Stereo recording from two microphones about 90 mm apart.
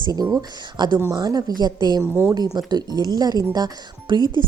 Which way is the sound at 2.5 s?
50° right (ahead or behind).